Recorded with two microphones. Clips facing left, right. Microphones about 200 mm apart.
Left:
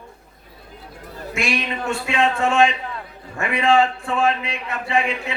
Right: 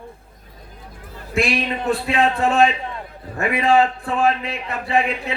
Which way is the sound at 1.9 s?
35° right (ahead or behind).